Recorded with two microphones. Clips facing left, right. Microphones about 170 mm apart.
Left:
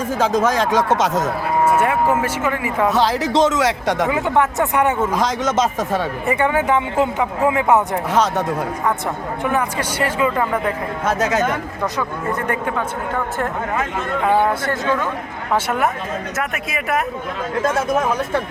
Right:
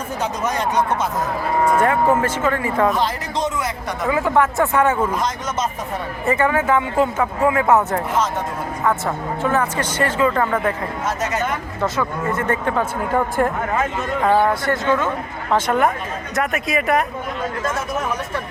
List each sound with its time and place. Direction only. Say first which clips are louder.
0.2 s speech: left 6 dB; 90° left
1.6 s speech: right 1 dB; 10° left (ahead or behind)
2.9 s speech: left 5 dB; 90° left
4.1 s speech: even; 20° left (ahead or behind)
5.1 s speech: left 5 dB; 90° left
6.2 s speech: right 2 dB; 20° left (ahead or behind)
8.1 s speech: left 6 dB; 70° left (ahead or behind)
9.4 s speech: right 1 dB; 15° left (ahead or behind)
11.0 s speech: left 5 dB; 90° left
11.9 s speech: right 1 dB; 15° left (ahead or behind)
14.6 s speech: right 1 dB; 20° right (ahead or behind)
15.5 s speech: right 2 dB; 5° left (ahead or behind)